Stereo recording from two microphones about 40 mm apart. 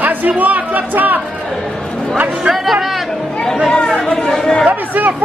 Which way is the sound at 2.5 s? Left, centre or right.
Centre.